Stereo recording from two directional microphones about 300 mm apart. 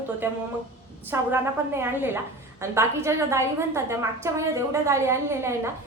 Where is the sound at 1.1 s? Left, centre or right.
Centre.